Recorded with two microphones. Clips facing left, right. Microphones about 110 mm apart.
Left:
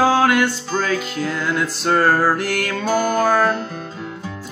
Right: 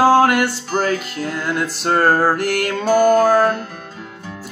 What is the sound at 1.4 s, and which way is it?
Music, 50° right (ahead or behind).